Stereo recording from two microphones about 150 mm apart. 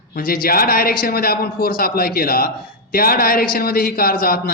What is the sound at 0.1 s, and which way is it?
A man's voice, 70° left (ahead or behind).